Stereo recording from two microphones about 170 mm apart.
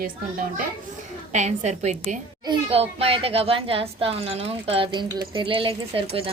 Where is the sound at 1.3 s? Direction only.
45° right (ahead or behind).